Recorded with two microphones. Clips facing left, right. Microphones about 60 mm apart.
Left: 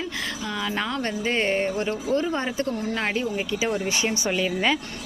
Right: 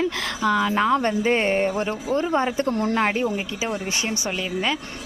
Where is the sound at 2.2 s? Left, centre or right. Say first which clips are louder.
Right 4 dB; right.